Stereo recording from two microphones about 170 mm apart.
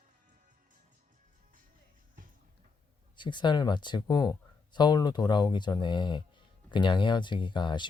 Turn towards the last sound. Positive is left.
turn(degrees=25)  # may be behind; listen again after turning